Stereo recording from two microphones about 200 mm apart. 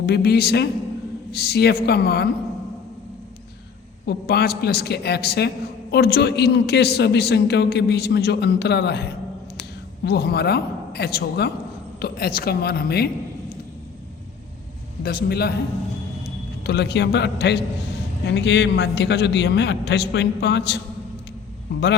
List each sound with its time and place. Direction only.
0.0 s a man's voice: 55° left (ahead or behind)
4.0 s a man's voice: 55° left (ahead or behind)
15.0 s a man's voice: 50° left (ahead or behind)
16.6 s a man's voice: 60° left (ahead or behind)